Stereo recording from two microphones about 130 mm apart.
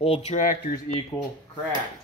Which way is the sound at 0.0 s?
50° left (ahead or behind).